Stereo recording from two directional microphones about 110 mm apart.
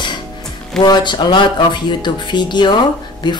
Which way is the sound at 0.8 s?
40° left (ahead or behind).